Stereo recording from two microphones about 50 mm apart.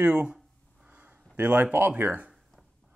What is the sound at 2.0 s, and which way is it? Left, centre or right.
Speech, right.